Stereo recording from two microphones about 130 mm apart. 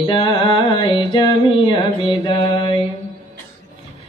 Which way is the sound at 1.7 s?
40° left (ahead or behind).